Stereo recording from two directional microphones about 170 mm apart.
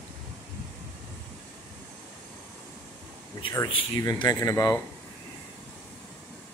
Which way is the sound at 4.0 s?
20° left (ahead or behind).